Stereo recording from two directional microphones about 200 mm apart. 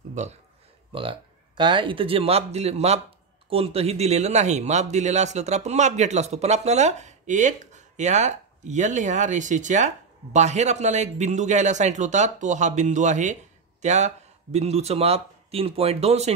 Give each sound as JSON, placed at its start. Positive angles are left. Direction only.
{"t": 0.1, "sound": "a man's voice", "side_deg": -35}